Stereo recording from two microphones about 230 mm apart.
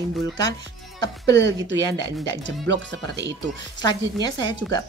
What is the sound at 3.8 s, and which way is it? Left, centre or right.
A woman's voice, centre.